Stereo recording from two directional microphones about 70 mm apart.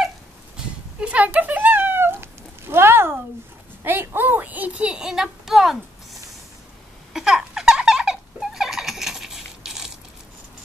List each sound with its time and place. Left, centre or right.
0.6 s cat: centre; by 3.2 s right
3.8 s speech: right; by 6.2 s centre
7.2 s baby laughter: centre